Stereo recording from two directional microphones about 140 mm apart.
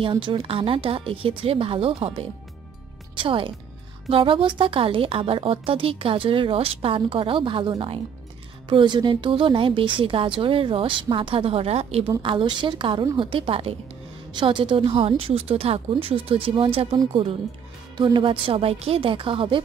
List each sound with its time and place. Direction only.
0.0 s a woman's voice: 35° right (ahead or behind)